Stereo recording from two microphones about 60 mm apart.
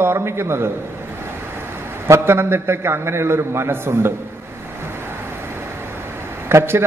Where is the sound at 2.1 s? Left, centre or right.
Right.